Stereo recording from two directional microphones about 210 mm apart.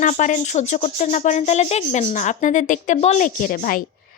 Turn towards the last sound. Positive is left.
turn(degrees=40)  # may be behind; listen again after turning